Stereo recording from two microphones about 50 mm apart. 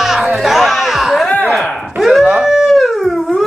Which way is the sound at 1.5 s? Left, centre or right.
Centre.